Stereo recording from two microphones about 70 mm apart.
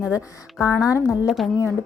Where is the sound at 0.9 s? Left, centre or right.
Left.